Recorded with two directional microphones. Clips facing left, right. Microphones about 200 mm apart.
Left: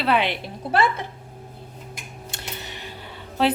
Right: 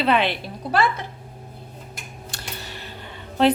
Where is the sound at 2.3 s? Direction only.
20° left (ahead or behind).